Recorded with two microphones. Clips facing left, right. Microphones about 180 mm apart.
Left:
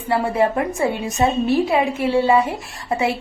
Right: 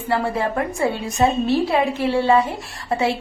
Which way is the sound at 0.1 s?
20° left (ahead or behind).